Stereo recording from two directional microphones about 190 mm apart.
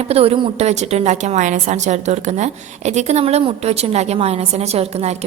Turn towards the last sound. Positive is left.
turn(degrees=-35)  # may be behind; listen again after turning